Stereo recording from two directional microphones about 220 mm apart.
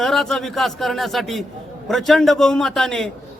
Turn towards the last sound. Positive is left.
turn(degrees=5)  # may be behind; listen again after turning